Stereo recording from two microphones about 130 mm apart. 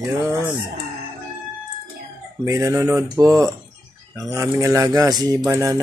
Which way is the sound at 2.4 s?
20° right (ahead or behind).